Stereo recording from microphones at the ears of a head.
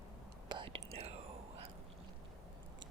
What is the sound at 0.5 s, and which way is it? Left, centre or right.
Whispering, right.